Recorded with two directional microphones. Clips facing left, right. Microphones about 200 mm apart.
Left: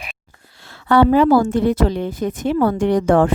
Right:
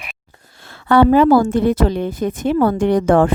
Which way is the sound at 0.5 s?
55° right (ahead or behind).